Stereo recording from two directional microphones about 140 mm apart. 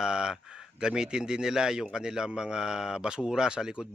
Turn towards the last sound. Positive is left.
turn(degrees=-5)  # may be behind; listen again after turning